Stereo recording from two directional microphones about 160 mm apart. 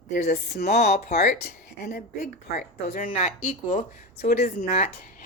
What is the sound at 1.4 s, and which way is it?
A woman's voice, 75° left (ahead or behind).